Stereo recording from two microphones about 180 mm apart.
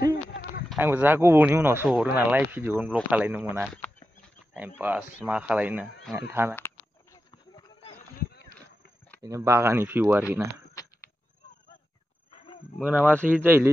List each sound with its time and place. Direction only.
0.0 s a sound: 65° left (ahead or behind)
0.7 s speech: 10° right (ahead or behind)
3.6 s speech: 5° left (ahead or behind)
4.6 s speech: 10° right (ahead or behind)
7.2 s clip-clop: 25° left (ahead or behind)
9.2 s speech: 15° right (ahead or behind)
12.8 s speech: 10° right (ahead or behind)